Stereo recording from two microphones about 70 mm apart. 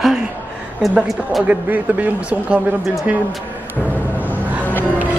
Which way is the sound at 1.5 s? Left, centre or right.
Right.